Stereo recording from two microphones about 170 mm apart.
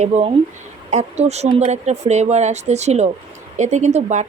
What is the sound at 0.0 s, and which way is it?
Speech, 40° right (ahead or behind).